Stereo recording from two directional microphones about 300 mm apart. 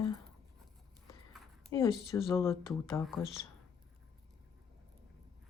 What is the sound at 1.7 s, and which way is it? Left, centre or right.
Speech, centre.